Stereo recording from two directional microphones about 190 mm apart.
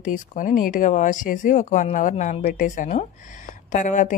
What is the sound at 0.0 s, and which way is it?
Speech, 40° left (ahead or behind).